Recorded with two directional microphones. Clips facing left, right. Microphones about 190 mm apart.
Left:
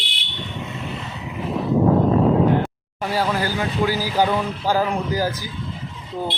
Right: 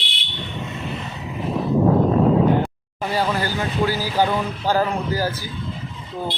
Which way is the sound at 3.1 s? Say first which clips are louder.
Even; 10° left (ahead or behind).